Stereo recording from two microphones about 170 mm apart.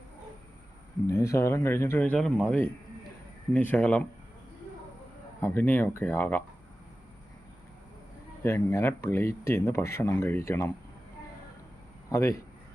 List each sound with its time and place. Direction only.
1.0 s speech: 15° left (ahead or behind)
5.4 s speech: 10° left (ahead or behind)
8.4 s speech: 15° left (ahead or behind)
12.0 s speech: 20° left (ahead or behind)